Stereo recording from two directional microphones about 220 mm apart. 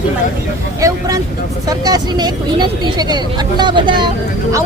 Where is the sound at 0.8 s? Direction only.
15° right (ahead or behind).